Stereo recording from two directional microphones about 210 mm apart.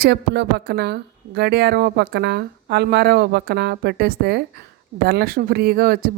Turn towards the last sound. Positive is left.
turn(degrees=-45)  # may be behind; listen again after turning